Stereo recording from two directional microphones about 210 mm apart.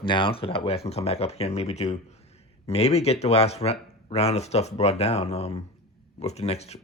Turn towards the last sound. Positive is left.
turn(degrees=30)  # may be behind; listen again after turning